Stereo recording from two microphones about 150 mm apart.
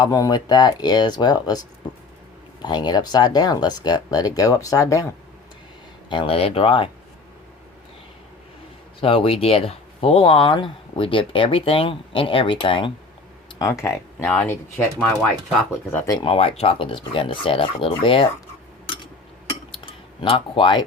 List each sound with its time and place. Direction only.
0.0 s speech: 25° left (ahead or behind)
2.6 s speech: 30° left (ahead or behind)
6.1 s speech: 35° left (ahead or behind)
9.0 s speech: 35° left (ahead or behind)
13.6 s speech: 20° left (ahead or behind)
15.9 s speech: 15° left (ahead or behind)
16.1 s speech: 40° left (ahead or behind)
19.8 s a sound: 35° left (ahead or behind)